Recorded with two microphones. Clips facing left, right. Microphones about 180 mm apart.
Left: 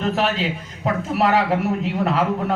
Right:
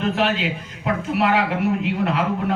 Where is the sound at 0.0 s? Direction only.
40° left (ahead or behind).